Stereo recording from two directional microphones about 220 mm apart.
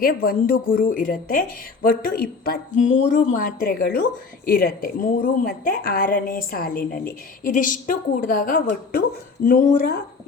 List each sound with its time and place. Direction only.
0.0 s a woman's voice: 40° left (ahead or behind)